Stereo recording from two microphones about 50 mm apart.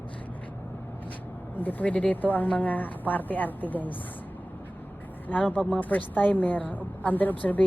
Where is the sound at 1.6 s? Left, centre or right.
Left.